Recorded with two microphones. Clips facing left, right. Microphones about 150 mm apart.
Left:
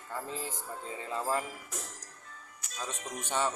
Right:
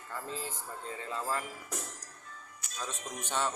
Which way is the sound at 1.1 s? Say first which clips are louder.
Left 3 dB; 15° left (ahead or behind).